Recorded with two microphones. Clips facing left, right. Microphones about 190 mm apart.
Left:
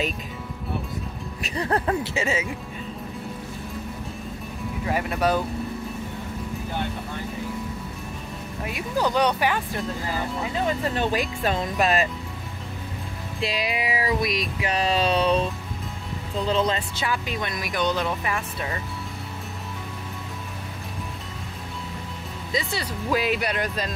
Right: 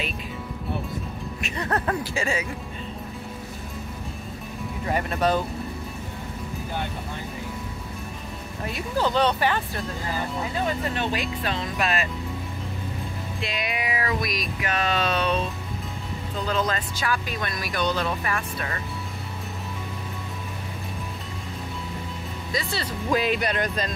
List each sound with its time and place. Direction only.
1.4 s speech: 30° left (ahead or behind)
4.8 s speech: 5° left (ahead or behind)
8.6 s speech: 10° left (ahead or behind)
11.0 s music: 45° left (ahead or behind)
13.4 s music: 30° left (ahead or behind)
16.3 s speech: 25° left (ahead or behind)
22.5 s speech: 20° left (ahead or behind)
23.0 s speech: 5° left (ahead or behind)